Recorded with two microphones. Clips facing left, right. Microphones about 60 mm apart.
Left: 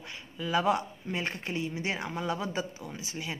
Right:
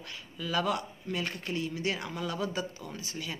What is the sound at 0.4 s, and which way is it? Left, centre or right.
Speech, left.